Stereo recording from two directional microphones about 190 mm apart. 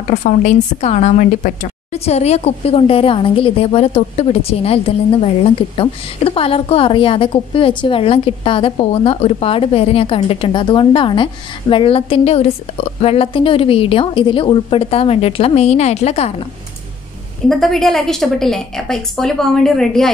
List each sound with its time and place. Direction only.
0.1 s a woman's voice: 40° left (ahead or behind)
17.5 s a woman's voice: centre (ahead or behind)